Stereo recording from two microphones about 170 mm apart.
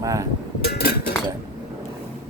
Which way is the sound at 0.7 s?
65° left (ahead or behind).